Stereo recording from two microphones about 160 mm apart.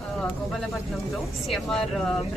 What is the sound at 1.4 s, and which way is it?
Speech, centre (ahead or behind).